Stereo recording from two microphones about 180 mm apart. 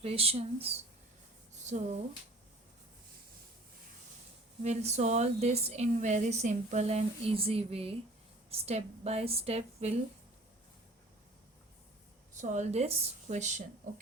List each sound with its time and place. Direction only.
0.0 s speech: 35° right (ahead or behind)
4.6 s speech: 40° right (ahead or behind)
12.3 s speech: 45° right (ahead or behind)